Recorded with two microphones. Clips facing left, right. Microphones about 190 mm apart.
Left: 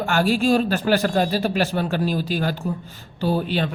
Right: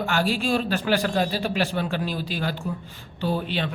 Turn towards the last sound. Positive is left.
turn(degrees=40)  # may be behind; listen again after turning